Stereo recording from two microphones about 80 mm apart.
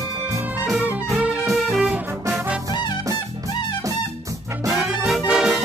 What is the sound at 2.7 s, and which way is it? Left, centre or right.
Music, left.